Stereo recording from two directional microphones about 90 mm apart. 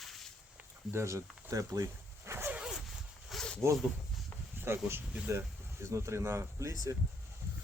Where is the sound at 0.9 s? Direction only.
35° right (ahead or behind).